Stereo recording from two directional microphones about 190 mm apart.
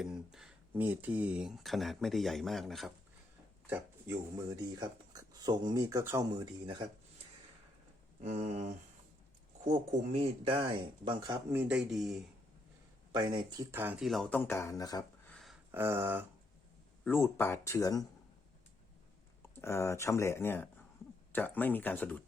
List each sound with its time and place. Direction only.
0.0 s speech: 5° right (ahead or behind)
3.7 s speech: 15° right (ahead or behind)
8.2 s a sound: 35° right (ahead or behind)
9.6 s speech: 35° right (ahead or behind); by 11.6 s 20° right (ahead or behind)
11.7 s speech: centre (ahead or behind)
13.1 s speech: 20° right (ahead or behind); by 15.0 s 20° left (ahead or behind)
15.7 s a sound: 10° right (ahead or behind)
17.0 s speech: 10° left (ahead or behind)
19.4 s speech: 15° left (ahead or behind)